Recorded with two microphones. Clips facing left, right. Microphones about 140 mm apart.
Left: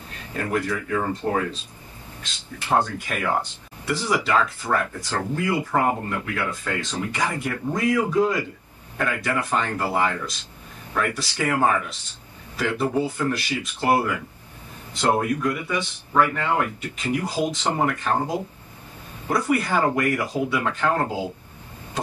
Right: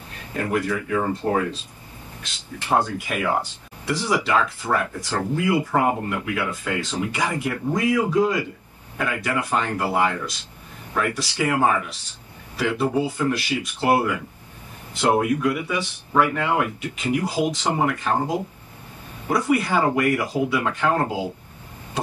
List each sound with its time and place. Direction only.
0.4 s speech: 10° right (ahead or behind)
2.7 s a man's voice: 10° right (ahead or behind)